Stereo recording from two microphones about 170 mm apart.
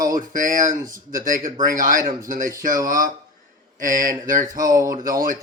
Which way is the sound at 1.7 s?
50° right (ahead or behind).